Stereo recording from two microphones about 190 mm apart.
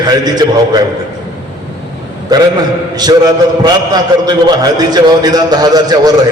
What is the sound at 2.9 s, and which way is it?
A man's voice, 20° right (ahead or behind).